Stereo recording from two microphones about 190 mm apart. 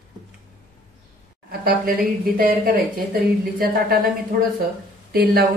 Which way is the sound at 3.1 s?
55° right (ahead or behind).